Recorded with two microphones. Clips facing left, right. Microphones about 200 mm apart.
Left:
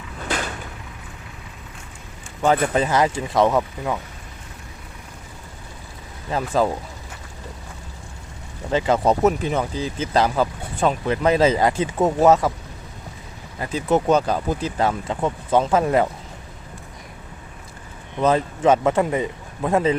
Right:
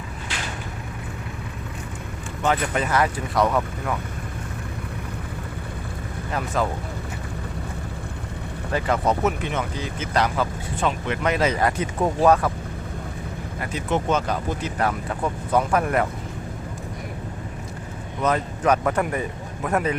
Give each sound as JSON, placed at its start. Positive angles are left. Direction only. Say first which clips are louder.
{"t": 2.7, "sound": "speech", "louder": "left 3 dB", "side_deg": 25}
{"t": 6.3, "sound": "speech", "louder": "left 4 dB", "side_deg": 30}
{"t": 8.7, "sound": "speech", "louder": "left 4 dB", "side_deg": 25}
{"t": 9.2, "sound": "speech", "louder": "left 5 dB", "side_deg": 35}
{"t": 13.6, "sound": "speech", "louder": "left 5 dB", "side_deg": 35}
{"t": 14.8, "sound": "speech", "louder": "left 2 dB", "side_deg": 25}
{"t": 18.2, "sound": "speech", "louder": "left 4 dB", "side_deg": 25}